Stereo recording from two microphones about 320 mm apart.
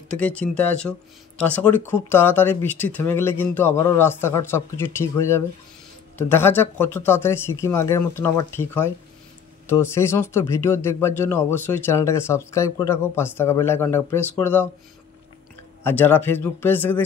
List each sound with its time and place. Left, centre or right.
0.1 s speech: centre
15.8 s speech: centre